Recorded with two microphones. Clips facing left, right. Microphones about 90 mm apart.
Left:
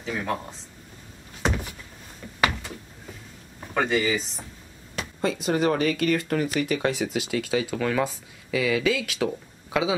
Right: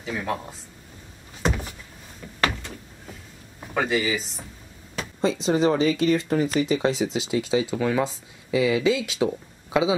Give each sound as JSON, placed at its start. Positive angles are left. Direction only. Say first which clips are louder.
{"t": 0.0, "sound": "speech", "louder": "even", "side_deg": 0}
{"t": 1.4, "sound": "power windows", "louder": "right 1 dB", "side_deg": 0}
{"t": 3.7, "sound": "speech", "louder": "even", "side_deg": -5}
{"t": 5.2, "sound": "speech", "louder": "right 3 dB", "side_deg": -25}
{"t": 7.7, "sound": "speech", "louder": "right 1 dB", "side_deg": -10}